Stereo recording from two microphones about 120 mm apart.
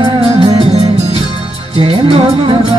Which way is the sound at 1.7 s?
50° right (ahead or behind).